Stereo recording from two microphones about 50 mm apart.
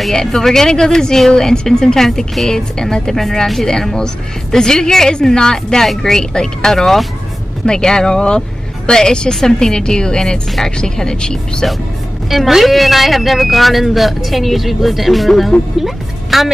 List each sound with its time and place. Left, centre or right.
0.1 s speech: centre
12.3 s a woman's voice: centre